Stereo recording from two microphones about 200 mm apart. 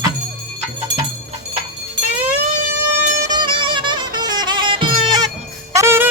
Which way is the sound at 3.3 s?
25° right (ahead or behind).